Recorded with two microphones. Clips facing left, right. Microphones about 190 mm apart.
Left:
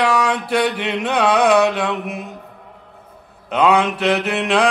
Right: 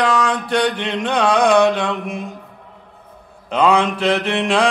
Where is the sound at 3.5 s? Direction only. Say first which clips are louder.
Even; centre (ahead or behind).